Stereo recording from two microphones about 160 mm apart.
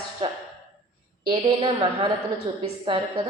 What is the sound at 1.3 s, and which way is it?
A woman's voice, 30° right (ahead or behind).